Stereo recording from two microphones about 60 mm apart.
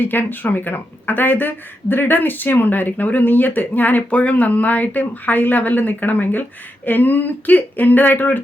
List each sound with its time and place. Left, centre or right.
0.0 s speech: left